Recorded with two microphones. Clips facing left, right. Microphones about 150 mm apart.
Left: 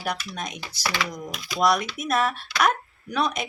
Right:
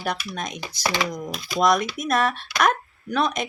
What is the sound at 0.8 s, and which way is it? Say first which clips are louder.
Speech: right 4 dB; 25° right (ahead or behind).